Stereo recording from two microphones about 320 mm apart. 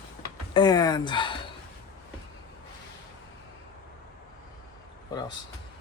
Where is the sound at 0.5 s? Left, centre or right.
Centre.